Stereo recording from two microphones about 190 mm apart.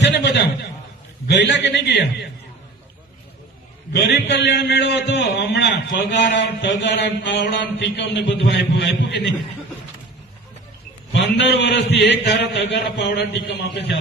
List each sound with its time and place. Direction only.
0.0 s a sound: 65° left (ahead or behind)
1.3 s a man's voice: 70° left (ahead or behind)
3.9 s a man's voice: 65° left (ahead or behind)
11.1 s a man's voice: 70° left (ahead or behind)